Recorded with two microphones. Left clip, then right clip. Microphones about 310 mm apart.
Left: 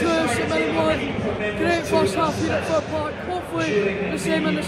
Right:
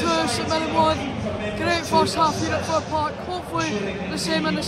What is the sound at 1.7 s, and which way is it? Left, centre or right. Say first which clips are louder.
Speech: right 1 dB; centre.